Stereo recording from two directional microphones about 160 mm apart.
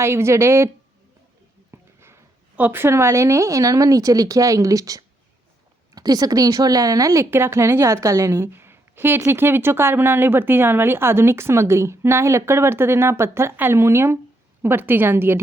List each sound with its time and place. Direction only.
0.0 s speech: 15° right (ahead or behind)
1.7 s speech: 15° right (ahead or behind)